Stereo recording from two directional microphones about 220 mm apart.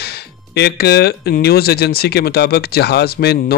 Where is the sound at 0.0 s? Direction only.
45° left (ahead or behind).